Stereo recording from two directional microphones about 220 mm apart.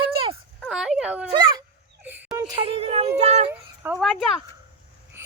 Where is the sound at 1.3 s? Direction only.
20° right (ahead or behind).